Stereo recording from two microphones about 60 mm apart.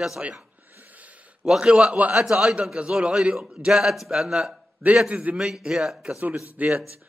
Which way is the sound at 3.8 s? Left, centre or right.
Centre.